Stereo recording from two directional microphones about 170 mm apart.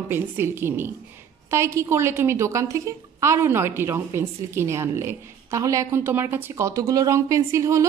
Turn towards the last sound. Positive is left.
turn(degrees=-15)  # may be behind; listen again after turning